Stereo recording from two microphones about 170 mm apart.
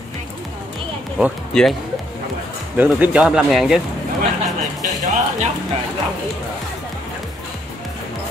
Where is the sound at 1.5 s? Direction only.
5° left (ahead or behind).